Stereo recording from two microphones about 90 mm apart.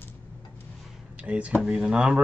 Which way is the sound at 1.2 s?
15° right (ahead or behind).